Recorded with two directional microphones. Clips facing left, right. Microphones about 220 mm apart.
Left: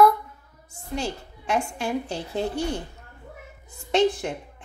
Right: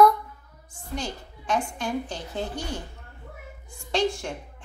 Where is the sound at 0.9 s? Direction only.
25° left (ahead or behind).